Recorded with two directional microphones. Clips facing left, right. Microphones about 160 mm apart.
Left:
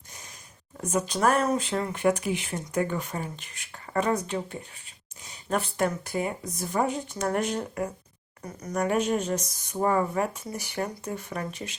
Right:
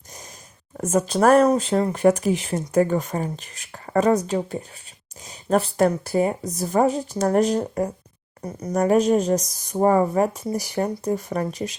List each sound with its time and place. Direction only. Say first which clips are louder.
0.8 s speech: right 7 dB; 45° right (ahead or behind)